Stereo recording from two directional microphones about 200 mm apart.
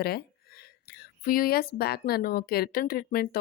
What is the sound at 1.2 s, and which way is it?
Speech, 45° left (ahead or behind).